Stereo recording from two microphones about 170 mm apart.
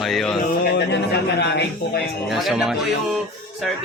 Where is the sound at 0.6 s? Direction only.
75° left (ahead or behind).